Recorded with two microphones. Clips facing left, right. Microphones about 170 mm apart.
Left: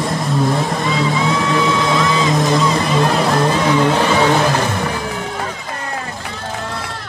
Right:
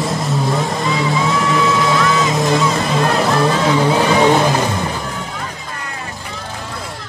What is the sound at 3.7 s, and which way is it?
Vehicle, 10° right (ahead or behind).